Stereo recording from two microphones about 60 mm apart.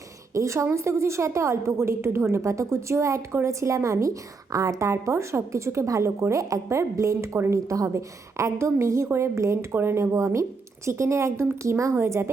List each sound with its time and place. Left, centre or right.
0.3 s a woman's voice: right